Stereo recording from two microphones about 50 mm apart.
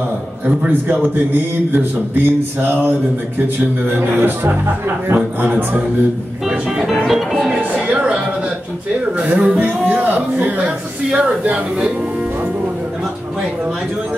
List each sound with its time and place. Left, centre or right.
0.5 s speech: right
3.9 s speech: right
7.1 s music: centre
9.2 s speech: right